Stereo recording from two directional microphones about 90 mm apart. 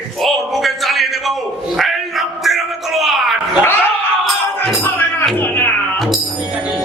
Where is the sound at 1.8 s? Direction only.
Centre (ahead or behind).